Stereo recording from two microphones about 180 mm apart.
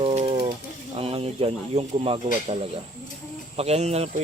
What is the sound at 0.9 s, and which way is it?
Speech, 35° right (ahead or behind).